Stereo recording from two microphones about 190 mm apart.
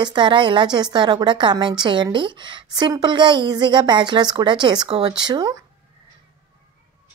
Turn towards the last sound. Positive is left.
turn(degrees=-20)  # may be behind; listen again after turning